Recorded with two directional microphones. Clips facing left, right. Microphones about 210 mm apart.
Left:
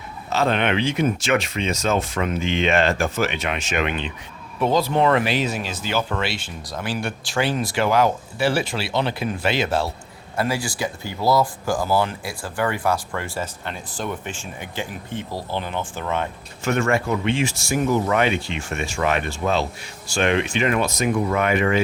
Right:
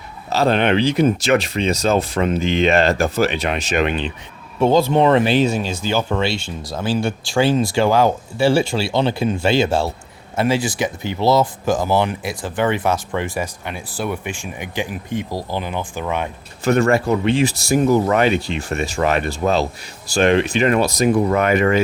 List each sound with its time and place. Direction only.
0.3 s speech: 35° right (ahead or behind); by 16.3 s 15° right (ahead or behind)
16.6 s speech: 35° right (ahead or behind)